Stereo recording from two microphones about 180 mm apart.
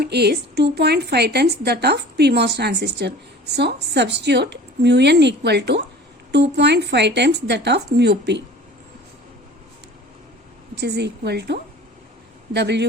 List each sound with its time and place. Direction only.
0.0 s a woman's voice: 65° right (ahead or behind)
10.8 s a woman's voice: 70° right (ahead or behind)